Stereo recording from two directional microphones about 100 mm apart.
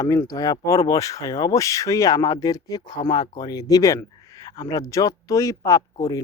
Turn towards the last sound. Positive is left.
turn(degrees=35)  # may be behind; listen again after turning